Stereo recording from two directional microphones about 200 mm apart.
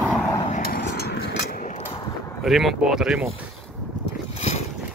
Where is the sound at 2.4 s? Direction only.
Centre (ahead or behind).